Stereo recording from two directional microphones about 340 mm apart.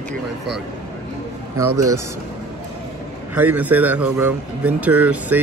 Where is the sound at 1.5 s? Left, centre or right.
Right.